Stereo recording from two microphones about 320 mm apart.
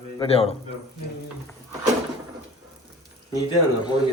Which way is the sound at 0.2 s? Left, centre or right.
Centre.